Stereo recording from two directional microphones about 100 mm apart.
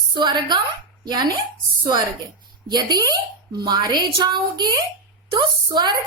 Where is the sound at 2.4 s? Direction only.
45° right (ahead or behind).